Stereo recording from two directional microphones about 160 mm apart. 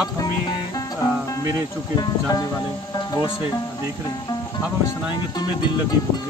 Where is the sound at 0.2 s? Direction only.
25° left (ahead or behind).